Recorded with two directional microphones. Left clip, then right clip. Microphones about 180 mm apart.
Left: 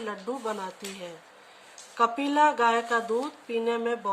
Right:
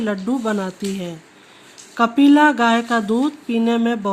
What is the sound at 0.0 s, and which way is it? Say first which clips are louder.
Speech: right 10 dB; 55° right (ahead or behind).